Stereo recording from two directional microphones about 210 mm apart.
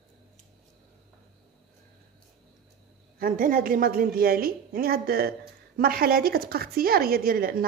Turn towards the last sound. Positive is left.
turn(degrees=-45)  # may be behind; listen again after turning